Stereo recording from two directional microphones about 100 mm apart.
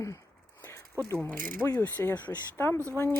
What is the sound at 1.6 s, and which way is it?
Speech, 25° left (ahead or behind).